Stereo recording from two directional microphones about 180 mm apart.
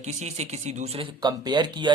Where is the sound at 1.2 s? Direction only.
25° right (ahead or behind).